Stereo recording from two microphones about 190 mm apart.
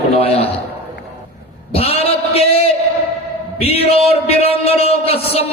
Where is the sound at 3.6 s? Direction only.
30° left (ahead or behind).